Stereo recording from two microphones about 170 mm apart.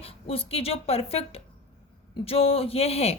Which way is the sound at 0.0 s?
35° left (ahead or behind).